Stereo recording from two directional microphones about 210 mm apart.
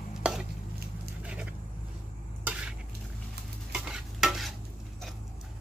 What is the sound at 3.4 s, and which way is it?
Dishes, 50° right (ahead or behind).